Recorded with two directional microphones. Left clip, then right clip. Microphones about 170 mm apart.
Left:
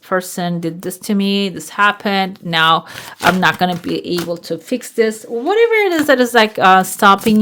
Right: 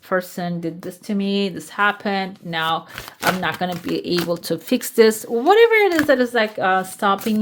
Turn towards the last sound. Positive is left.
turn(degrees=40)  # may be behind; listen again after turning